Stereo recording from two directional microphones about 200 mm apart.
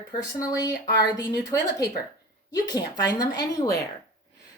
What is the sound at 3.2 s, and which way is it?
Speech, 20° left (ahead or behind).